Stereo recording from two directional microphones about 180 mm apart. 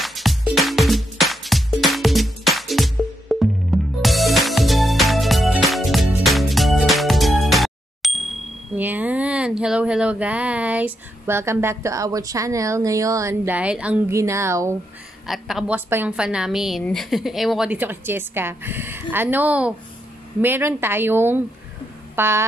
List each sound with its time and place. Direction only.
0.0 s music: centre (ahead or behind)
8.7 s speech: 10° right (ahead or behind)
15.2 s speech: centre (ahead or behind)